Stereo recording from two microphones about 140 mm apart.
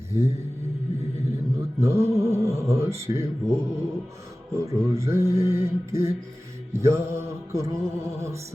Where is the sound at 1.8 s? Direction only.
20° right (ahead or behind).